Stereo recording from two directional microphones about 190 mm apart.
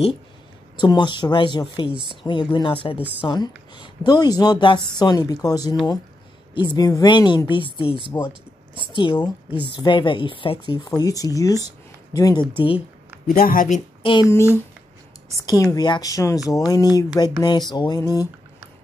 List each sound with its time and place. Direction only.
0.7 s a woman's voice: 25° left (ahead or behind)
8.3 s speech: 25° right (ahead or behind)
8.9 s a woman's voice: 25° left (ahead or behind)
13.3 s speech: 45° left (ahead or behind)
15.3 s a woman's voice: 20° left (ahead or behind)